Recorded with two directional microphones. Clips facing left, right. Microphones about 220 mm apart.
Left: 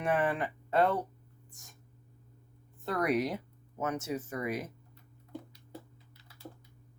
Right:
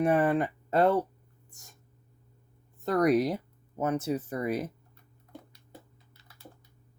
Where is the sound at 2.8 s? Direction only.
40° right (ahead or behind).